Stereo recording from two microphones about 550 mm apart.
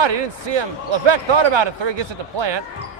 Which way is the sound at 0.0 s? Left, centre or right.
Right.